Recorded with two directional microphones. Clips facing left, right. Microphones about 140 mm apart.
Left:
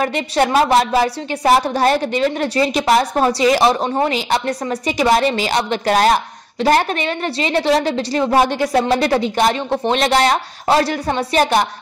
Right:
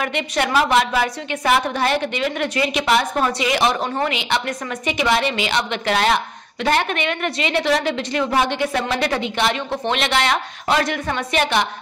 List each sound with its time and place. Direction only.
0.0 s a woman's voice: 35° left (ahead or behind)